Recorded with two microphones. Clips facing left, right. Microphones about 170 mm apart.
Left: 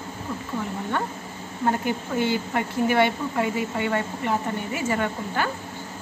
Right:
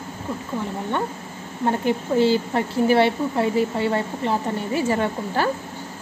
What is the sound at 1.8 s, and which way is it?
A woman's voice, 30° right (ahead or behind).